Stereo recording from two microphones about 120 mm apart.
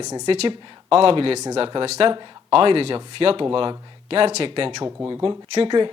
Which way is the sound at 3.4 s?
40° right (ahead or behind).